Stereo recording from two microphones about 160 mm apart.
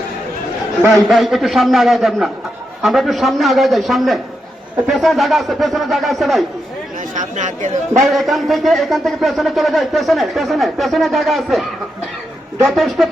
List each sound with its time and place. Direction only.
0.9 s a man's voice: centre (ahead or behind)
7.1 s speech: 50° right (ahead or behind)
8.0 s a man's voice: centre (ahead or behind)
12.6 s a man's voice: centre (ahead or behind)